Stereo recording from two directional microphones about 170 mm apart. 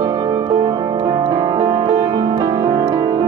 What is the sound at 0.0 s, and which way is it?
Music, 25° right (ahead or behind).